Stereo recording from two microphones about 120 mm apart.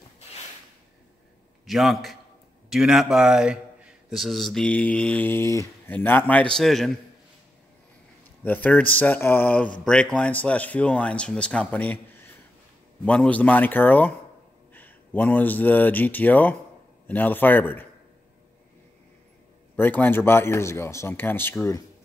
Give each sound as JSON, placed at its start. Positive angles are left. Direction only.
{"t": 1.7, "sound": "speech", "side_deg": 0}
{"t": 8.5, "sound": "speech", "side_deg": 15}
{"t": 19.7, "sound": "a man's voice", "side_deg": 15}